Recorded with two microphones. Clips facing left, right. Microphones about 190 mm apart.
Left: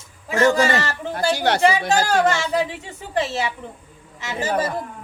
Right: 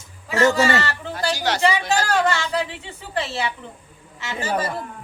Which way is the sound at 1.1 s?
55° left (ahead or behind).